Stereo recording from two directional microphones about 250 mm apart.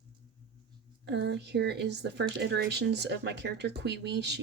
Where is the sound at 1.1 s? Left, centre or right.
Right.